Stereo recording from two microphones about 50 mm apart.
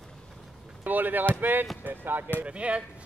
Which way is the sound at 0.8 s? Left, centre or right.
Right.